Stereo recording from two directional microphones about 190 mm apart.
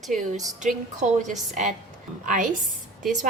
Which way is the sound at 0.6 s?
40° right (ahead or behind).